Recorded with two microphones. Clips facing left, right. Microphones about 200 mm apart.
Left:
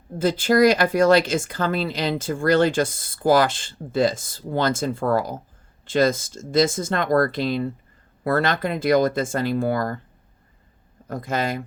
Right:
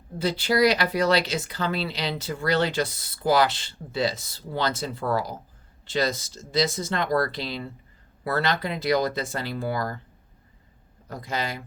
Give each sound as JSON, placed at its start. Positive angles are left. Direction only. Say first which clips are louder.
{"t": 0.2, "sound": "speech", "louder": "left 5 dB", "side_deg": 50}
{"t": 11.1, "sound": "speech", "louder": "left 6 dB", "side_deg": 50}